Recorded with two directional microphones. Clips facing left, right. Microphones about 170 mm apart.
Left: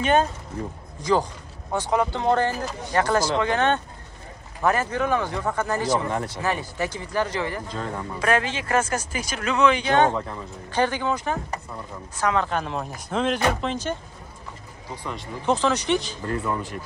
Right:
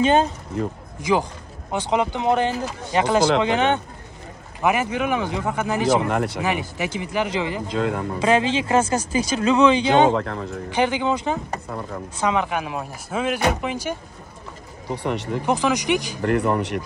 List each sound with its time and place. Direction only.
0.0 s speech: 25° right (ahead or behind)
1.7 s speech: 20° right (ahead or behind)
5.9 s speech: 85° right
6.4 s speech: 15° right (ahead or behind)
7.6 s speech: 90° right
8.2 s speech: 25° right (ahead or behind)
9.8 s speech: 90° right
10.8 s speech: 15° right (ahead or behind)
11.7 s speech: 80° right
12.2 s speech: 15° right (ahead or behind)
14.9 s speech: 65° right (ahead or behind)
15.4 s speech: 15° right (ahead or behind)
16.2 s speech: 70° right (ahead or behind)